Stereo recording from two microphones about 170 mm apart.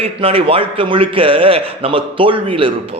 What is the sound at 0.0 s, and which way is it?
A man's voice, 35° right (ahead or behind).